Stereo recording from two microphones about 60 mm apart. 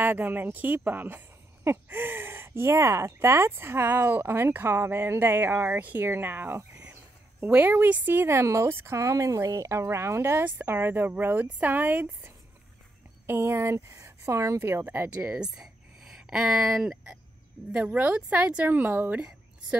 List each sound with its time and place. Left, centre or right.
0.0 s speech: right
5.8 s a woman's voice: right
7.6 s speech: right
8.4 s speech: right
10.4 s speech: right
13.3 s speech: right
14.8 s a woman's voice: right
15.3 s speech: centre
17.7 s a woman's voice: right